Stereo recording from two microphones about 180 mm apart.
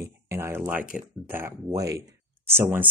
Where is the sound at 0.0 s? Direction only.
15° right (ahead or behind).